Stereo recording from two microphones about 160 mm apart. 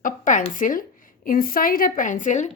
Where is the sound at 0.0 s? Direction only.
55° left (ahead or behind).